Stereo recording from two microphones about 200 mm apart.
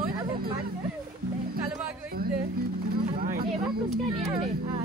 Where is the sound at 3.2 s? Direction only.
45° right (ahead or behind).